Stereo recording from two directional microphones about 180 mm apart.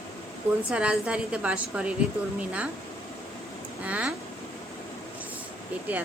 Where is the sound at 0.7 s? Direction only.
5° right (ahead or behind).